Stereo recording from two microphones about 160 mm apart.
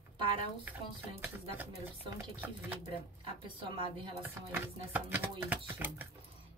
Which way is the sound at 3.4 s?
30° right (ahead or behind).